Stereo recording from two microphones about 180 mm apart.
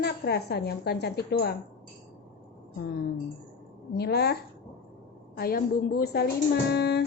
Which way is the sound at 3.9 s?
65° left (ahead or behind).